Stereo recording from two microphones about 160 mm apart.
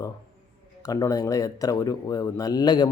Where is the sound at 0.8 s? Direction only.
20° left (ahead or behind).